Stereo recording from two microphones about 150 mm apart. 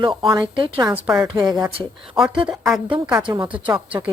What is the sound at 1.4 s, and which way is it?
Speech, 25° right (ahead or behind).